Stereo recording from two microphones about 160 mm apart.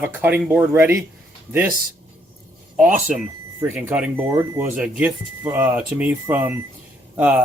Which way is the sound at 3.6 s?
10° right (ahead or behind).